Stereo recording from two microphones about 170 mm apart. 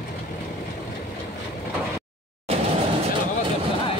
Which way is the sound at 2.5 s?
35° right (ahead or behind).